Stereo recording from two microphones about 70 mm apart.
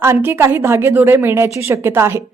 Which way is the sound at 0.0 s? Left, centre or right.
Right.